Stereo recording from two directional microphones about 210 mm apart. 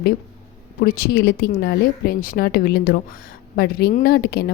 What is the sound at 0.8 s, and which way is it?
A woman's voice, 50° left (ahead or behind).